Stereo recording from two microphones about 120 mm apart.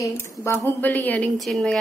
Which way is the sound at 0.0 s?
25° left (ahead or behind).